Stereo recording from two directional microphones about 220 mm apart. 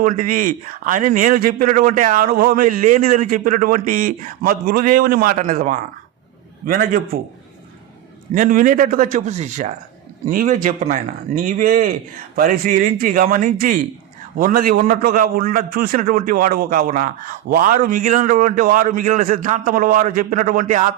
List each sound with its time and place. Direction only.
0.0 s a man's voice: 40° right (ahead or behind)
8.3 s a man's voice: 35° right (ahead or behind)